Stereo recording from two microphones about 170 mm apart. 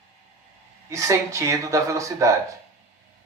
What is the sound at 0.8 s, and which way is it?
A woman's voice, 20° right (ahead or behind).